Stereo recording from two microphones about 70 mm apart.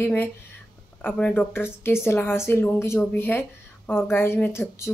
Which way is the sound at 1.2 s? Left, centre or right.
Left.